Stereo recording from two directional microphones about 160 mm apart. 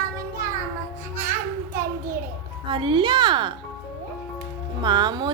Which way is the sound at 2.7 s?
35° right (ahead or behind).